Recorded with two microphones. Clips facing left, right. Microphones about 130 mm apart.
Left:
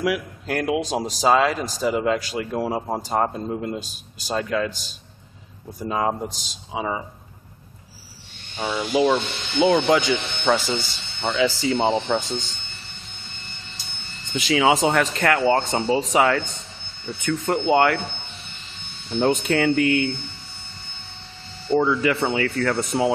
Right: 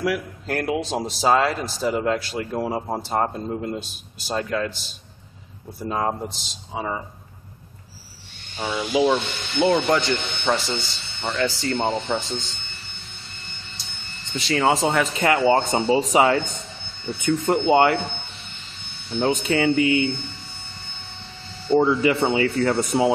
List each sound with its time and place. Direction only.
0.0 s speech: 5° left (ahead or behind)
5.9 s speech: centre (ahead or behind)
8.5 s speech: 5° left (ahead or behind)
14.3 s speech: 5° left (ahead or behind)
15.2 s speech: 15° right (ahead or behind)
17.5 s speech: 10° right (ahead or behind)
19.1 s speech: centre (ahead or behind)
21.7 s speech: 20° right (ahead or behind)